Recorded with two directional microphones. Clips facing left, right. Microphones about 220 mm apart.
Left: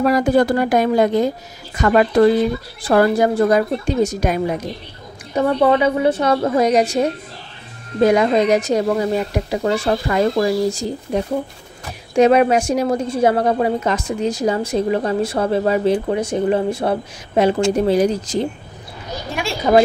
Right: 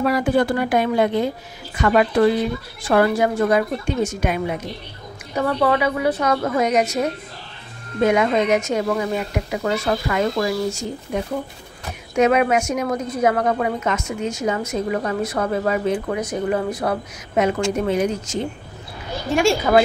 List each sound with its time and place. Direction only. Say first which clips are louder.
0.0 s a woman's voice: left 4 dB; 40° left (ahead or behind)
5.4 s a woman's voice: left 4 dB; 25° left (ahead or behind)
19.7 s a woman's voice: left 4 dB; 20° left (ahead or behind)